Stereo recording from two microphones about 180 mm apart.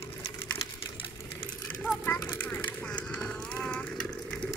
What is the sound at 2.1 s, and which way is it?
Vehicle, 15° left (ahead or behind).